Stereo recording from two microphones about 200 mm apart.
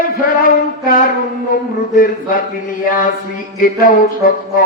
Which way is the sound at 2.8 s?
45° left (ahead or behind).